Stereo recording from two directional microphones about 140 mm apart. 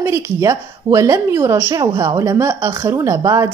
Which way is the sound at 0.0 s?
20° right (ahead or behind).